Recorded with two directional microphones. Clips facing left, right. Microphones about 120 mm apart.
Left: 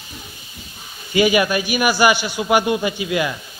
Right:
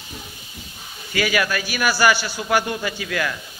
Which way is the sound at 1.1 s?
20° left (ahead or behind).